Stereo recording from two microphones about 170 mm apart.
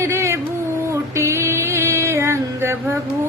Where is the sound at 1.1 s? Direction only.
15° right (ahead or behind).